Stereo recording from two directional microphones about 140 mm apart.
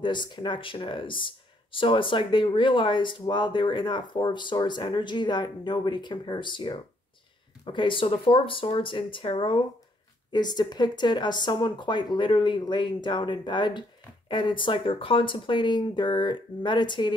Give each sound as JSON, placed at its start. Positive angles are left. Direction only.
{"t": 0.0, "sound": "speech", "side_deg": 35}